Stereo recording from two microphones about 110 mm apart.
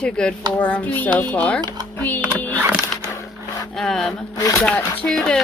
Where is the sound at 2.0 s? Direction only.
15° left (ahead or behind).